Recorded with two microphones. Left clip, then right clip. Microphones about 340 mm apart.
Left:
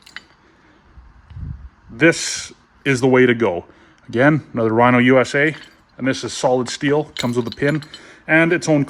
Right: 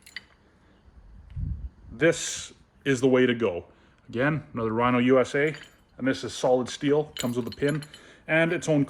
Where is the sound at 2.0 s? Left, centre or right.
Left.